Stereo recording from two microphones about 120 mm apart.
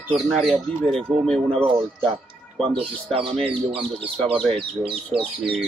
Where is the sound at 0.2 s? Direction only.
Centre (ahead or behind).